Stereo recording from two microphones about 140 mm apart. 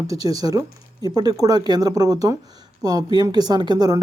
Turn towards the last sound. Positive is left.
turn(degrees=-30)  # may be behind; listen again after turning